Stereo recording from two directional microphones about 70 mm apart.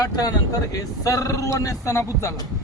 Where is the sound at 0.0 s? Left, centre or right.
Left.